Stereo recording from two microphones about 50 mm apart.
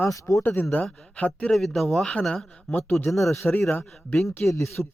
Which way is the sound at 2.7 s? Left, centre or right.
Left.